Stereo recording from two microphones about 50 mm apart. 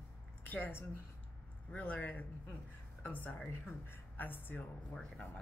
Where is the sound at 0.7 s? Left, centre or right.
Left.